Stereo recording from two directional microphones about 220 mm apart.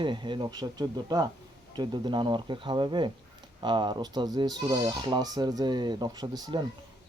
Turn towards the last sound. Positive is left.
turn(degrees=-20)  # may be behind; listen again after turning